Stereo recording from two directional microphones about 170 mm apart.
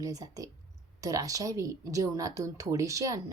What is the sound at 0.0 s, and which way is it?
A woman's voice, 20° right (ahead or behind).